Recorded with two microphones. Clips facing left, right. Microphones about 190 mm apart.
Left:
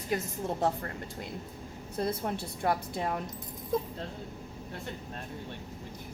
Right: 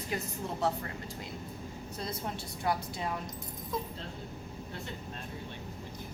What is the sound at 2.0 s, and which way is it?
A woman's voice, 55° left (ahead or behind).